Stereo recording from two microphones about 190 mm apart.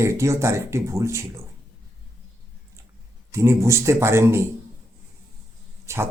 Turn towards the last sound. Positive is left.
turn(degrees=-15)  # may be behind; listen again after turning